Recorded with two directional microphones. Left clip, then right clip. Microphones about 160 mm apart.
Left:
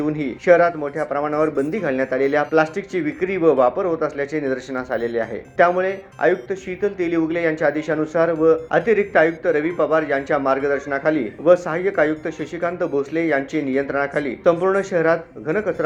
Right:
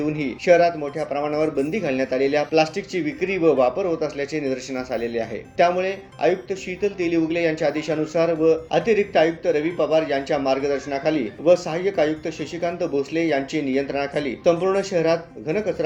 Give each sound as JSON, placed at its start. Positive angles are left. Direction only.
{"t": 0.0, "sound": "a man's voice", "side_deg": 0}